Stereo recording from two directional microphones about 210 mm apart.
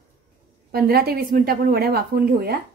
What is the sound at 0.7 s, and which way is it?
A woman's voice, 45° right (ahead or behind).